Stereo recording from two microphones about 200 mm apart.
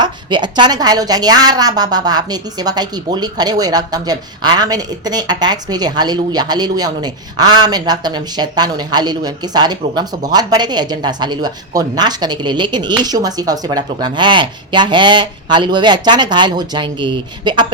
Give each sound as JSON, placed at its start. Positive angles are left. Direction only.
{"t": 0.0, "sound": "a woman's voice", "side_deg": -20}